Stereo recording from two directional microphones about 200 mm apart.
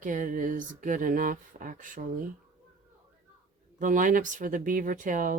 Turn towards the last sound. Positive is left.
turn(degrees=-40)  # may be behind; listen again after turning